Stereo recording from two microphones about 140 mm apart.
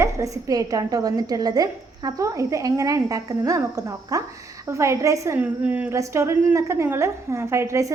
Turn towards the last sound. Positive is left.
turn(degrees=-20)  # may be behind; listen again after turning